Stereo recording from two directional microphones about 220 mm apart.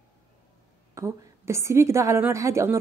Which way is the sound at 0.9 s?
15° right (ahead or behind).